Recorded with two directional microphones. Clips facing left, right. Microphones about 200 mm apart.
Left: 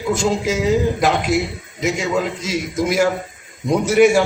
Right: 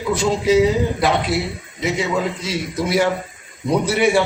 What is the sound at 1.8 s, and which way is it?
A man's voice, 45° left (ahead or behind).